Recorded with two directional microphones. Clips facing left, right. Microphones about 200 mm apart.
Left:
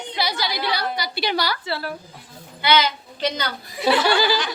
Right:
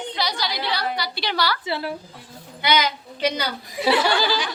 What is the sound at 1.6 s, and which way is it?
A woman's voice, 20° right (ahead or behind).